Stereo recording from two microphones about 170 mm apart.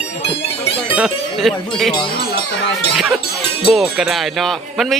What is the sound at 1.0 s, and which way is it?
Speech, centre (ahead or behind).